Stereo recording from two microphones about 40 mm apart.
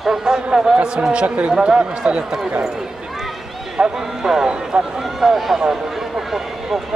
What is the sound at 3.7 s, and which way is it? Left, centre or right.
Speech, centre.